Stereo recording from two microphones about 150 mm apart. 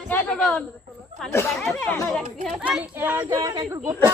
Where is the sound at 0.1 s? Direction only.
5° left (ahead or behind).